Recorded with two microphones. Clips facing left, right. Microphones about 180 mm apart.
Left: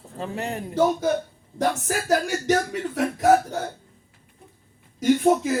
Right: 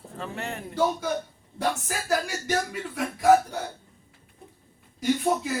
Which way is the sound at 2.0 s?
45° left (ahead or behind).